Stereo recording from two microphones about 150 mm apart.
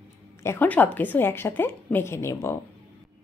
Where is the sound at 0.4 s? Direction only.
15° left (ahead or behind).